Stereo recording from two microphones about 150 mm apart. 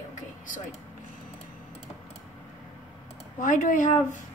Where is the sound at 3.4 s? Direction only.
60° left (ahead or behind).